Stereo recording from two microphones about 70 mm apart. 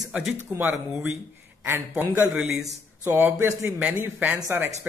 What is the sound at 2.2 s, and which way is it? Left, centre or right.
Speech, right.